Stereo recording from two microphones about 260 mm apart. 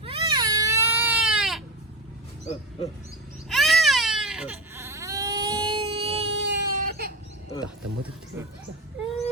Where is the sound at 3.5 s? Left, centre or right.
Centre; by 6.3 s right.